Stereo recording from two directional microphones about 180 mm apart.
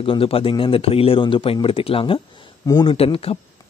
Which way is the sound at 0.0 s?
30° left (ahead or behind).